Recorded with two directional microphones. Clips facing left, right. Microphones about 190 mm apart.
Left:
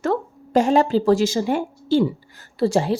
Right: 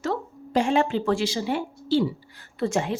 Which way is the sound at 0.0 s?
50° left (ahead or behind).